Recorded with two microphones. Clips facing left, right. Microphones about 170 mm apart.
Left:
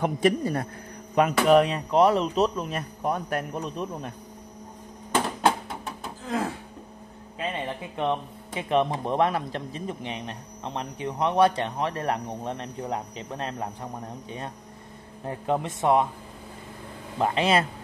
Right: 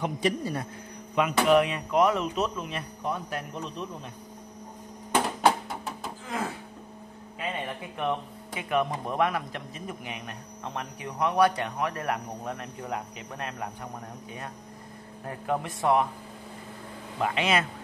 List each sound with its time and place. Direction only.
0.0 s a man's voice: 50° left (ahead or behind)
1.1 s speech: 40° left (ahead or behind)
5.1 s a sound: 5° right (ahead or behind)
7.9 s speech: 25° left (ahead or behind)
15.2 s speech: 25° left (ahead or behind)
17.2 s speech: 35° left (ahead or behind)